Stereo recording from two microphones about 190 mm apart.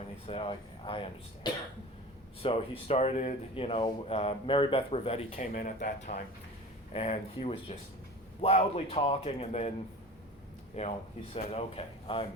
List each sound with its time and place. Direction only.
0.3 s speech: 30° left (ahead or behind)
2.4 s speech: 30° left (ahead or behind)
5.4 s a man's voice: 45° left (ahead or behind)
10.8 s a man's voice: 35° left (ahead or behind)